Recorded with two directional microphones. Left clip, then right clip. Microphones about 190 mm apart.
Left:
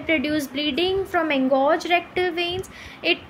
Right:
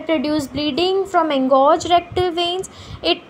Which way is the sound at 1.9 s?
20° left (ahead or behind).